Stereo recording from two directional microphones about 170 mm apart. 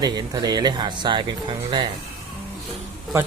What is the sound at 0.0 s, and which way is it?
Speech, 25° right (ahead or behind).